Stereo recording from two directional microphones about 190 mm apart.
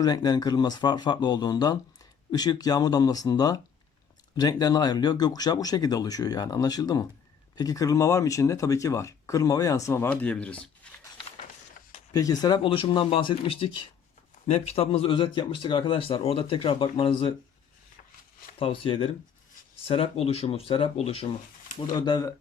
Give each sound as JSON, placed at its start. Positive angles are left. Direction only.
{"t": 0.0, "sound": "speech", "side_deg": 20}
{"t": 12.1, "sound": "speech", "side_deg": 20}
{"t": 18.6, "sound": "speech", "side_deg": 30}